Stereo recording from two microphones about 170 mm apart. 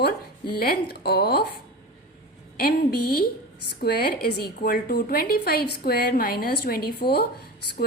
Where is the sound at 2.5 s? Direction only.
65° left (ahead or behind).